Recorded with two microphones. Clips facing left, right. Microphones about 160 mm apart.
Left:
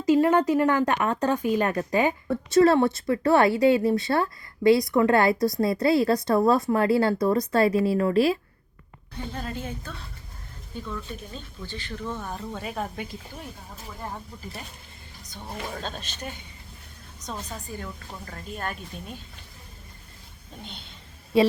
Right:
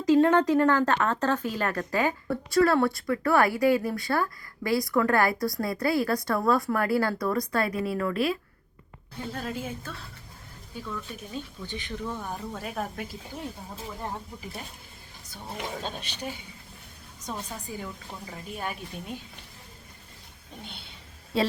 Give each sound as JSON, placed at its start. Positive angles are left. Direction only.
{"t": 0.0, "sound": "a woman's voice", "side_deg": 10}
{"t": 9.2, "sound": "a woman's voice", "side_deg": 0}
{"t": 15.7, "sound": "speech", "side_deg": -10}